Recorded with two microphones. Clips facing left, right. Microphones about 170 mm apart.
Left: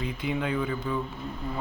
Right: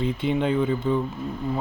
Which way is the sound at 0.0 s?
30° right (ahead or behind).